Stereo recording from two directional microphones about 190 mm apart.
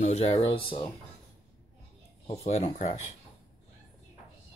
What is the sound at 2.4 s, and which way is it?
Speech, 35° left (ahead or behind).